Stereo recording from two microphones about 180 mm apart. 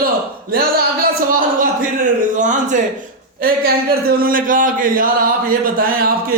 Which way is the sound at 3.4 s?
55° right (ahead or behind).